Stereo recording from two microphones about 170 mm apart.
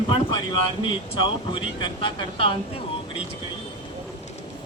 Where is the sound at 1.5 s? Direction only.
30° left (ahead or behind).